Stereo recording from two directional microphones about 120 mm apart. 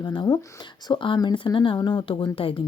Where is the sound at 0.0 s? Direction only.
35° left (ahead or behind).